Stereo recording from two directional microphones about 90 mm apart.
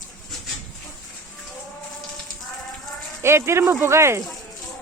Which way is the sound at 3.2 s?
30° right (ahead or behind).